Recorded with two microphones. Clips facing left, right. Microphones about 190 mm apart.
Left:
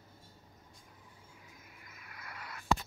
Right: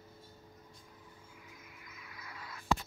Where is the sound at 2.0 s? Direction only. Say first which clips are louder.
Left 1 dB; 55° left (ahead or behind).